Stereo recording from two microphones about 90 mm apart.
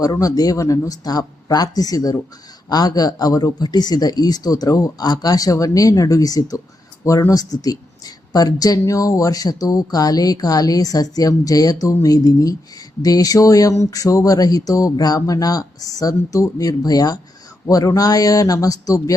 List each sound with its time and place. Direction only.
0.0 s a man's voice: 45° left (ahead or behind)